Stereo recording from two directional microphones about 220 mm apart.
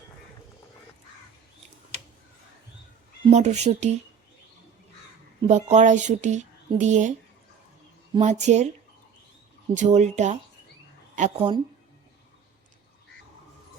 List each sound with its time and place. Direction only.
3.2 s speech: 30° right (ahead or behind)
5.4 s speech: 30° right (ahead or behind)
8.1 s speech: 30° right (ahead or behind)
9.7 s speech: 30° right (ahead or behind)